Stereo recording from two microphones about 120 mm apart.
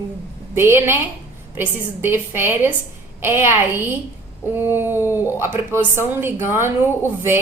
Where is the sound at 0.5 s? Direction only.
20° right (ahead or behind).